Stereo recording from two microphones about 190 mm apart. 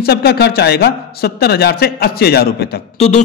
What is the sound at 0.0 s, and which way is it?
A man's voice, 55° left (ahead or behind).